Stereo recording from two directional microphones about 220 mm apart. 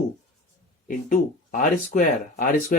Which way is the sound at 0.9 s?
35° left (ahead or behind).